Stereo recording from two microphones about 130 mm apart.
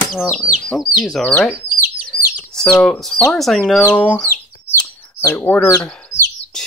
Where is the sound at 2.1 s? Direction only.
5° left (ahead or behind).